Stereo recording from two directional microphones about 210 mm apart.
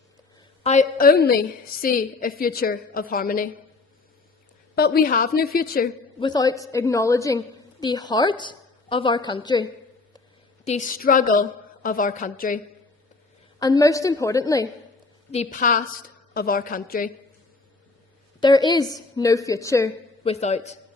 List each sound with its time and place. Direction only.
0.6 s a woman's voice: 35° left (ahead or behind)
4.7 s a woman's voice: 45° left (ahead or behind)
6.1 s a woman's voice: 20° left (ahead or behind)
10.7 s a woman's voice: 40° left (ahead or behind)
13.6 s a woman's voice: 15° left (ahead or behind)
15.3 s a woman's voice: 35° left (ahead or behind)
18.3 s a woman's voice: 20° left (ahead or behind)
20.2 s a woman's voice: 30° left (ahead or behind)